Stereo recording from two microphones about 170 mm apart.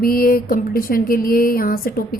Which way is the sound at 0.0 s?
60° left (ahead or behind).